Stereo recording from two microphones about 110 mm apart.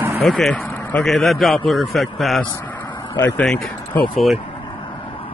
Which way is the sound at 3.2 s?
15° left (ahead or behind).